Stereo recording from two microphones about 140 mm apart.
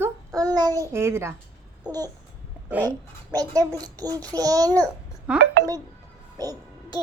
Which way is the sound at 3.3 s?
25° right (ahead or behind).